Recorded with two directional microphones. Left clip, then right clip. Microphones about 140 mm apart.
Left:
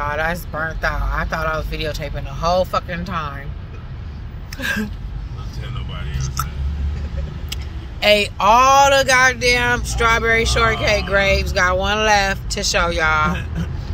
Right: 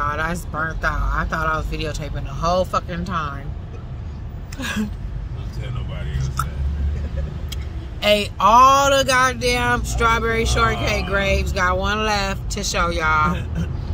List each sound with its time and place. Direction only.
0.0 s vehicle: 15° right (ahead or behind)
0.5 s speech: centre (ahead or behind)
1.1 s speech: 15° right (ahead or behind)
4.6 s speech: 10° right (ahead or behind)
6.1 s speech: 15° right (ahead or behind)
8.0 s speech: 10° right (ahead or behind)